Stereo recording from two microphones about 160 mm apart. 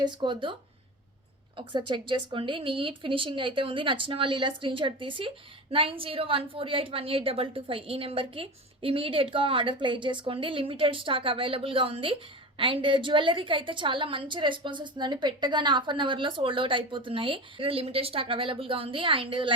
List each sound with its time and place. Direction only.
0.0 s speech: 30° right (ahead or behind)
1.5 s a woman's voice: 30° right (ahead or behind)